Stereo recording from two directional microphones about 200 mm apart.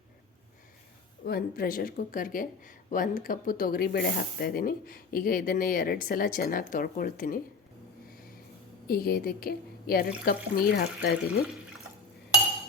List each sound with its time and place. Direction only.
1.2 s speech: 50° left (ahead or behind)
8.9 s speech: 50° left (ahead or behind)